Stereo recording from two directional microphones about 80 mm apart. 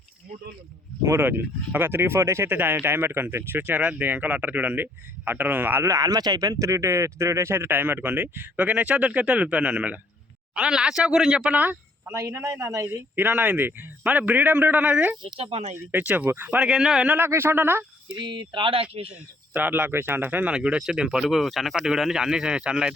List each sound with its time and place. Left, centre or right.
1.2 s speech: right
5.8 s speech: right
12.0 s a man's voice: right
13.1 s speech: right
16.6 s speech: centre
17.1 s speech: right
18.2 s speech: right
19.1 s speech: right
20.5 s speech: centre